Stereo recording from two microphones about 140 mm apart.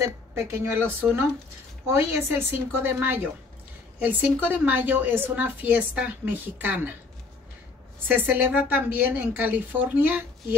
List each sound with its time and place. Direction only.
0.0 s a woman's voice: 15° right (ahead or behind)
8.1 s a woman's voice: 15° right (ahead or behind)